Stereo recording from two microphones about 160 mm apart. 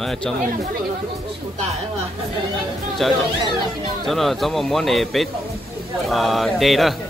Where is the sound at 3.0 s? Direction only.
5° left (ahead or behind).